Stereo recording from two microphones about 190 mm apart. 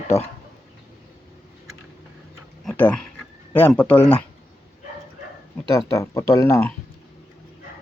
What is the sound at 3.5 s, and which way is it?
Speech, 10° left (ahead or behind).